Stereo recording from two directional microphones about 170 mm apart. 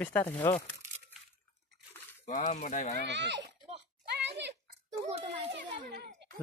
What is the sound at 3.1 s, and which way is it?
Speech, 90° right.